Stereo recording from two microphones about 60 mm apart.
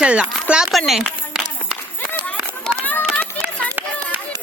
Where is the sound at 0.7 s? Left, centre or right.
Centre.